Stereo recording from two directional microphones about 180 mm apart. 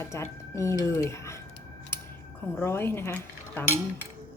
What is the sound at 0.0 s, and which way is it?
Speech, 15° left (ahead or behind).